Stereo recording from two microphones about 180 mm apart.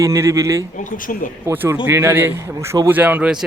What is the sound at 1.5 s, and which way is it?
A man's voice, 10° right (ahead or behind).